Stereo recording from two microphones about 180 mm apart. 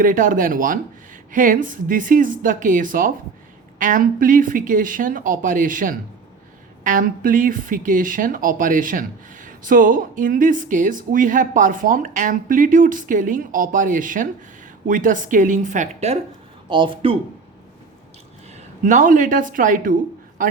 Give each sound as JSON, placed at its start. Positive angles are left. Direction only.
{"t": 0.0, "sound": "speech", "side_deg": -50}
{"t": 16.6, "sound": "speech", "side_deg": -25}
{"t": 18.5, "sound": "speech", "side_deg": -45}